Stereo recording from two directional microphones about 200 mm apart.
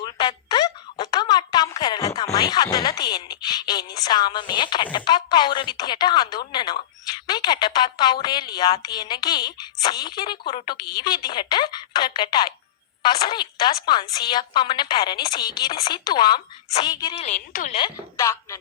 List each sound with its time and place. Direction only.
0.0 s a sound: 20° left (ahead or behind)
7.1 s a woman's voice: 20° left (ahead or behind)
17.2 s a woman's voice: 35° left (ahead or behind)
17.7 s a woman's voice: 20° left (ahead or behind)